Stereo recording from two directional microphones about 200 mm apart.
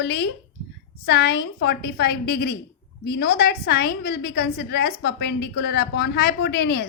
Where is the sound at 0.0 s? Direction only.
55° left (ahead or behind).